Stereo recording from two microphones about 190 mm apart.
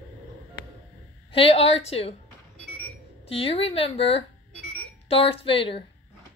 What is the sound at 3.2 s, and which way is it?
A woman's voice, 30° left (ahead or behind).